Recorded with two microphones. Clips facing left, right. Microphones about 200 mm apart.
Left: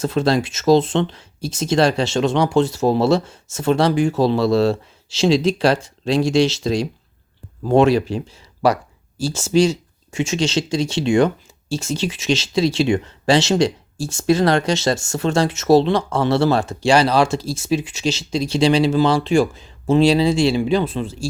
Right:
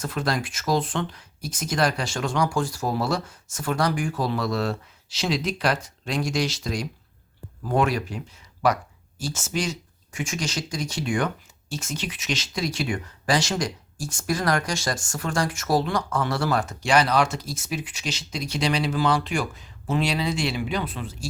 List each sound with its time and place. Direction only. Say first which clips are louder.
0.0 s speech: left 9 dB; 25° left (ahead or behind)